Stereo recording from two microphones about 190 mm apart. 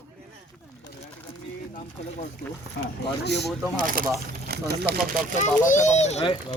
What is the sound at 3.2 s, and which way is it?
Speech, 65° left (ahead or behind).